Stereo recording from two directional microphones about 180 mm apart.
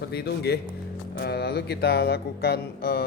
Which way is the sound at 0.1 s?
65° left (ahead or behind).